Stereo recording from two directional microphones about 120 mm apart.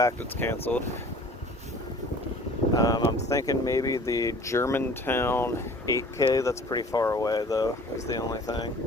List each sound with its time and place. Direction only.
0.0 s speech: 20° left (ahead or behind)
2.7 s speech: 30° left (ahead or behind)